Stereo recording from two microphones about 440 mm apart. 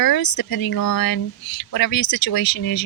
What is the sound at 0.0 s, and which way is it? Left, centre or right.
Speech, left.